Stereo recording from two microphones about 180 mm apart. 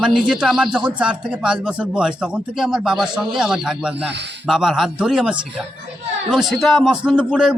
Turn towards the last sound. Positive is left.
turn(degrees=-5)  # may be behind; listen again after turning